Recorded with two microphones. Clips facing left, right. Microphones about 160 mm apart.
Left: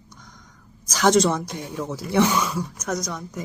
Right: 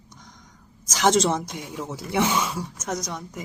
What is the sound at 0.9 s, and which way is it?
Speech, 20° right (ahead or behind).